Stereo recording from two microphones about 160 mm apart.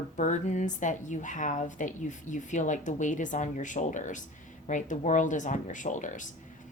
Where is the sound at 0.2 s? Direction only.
50° left (ahead or behind).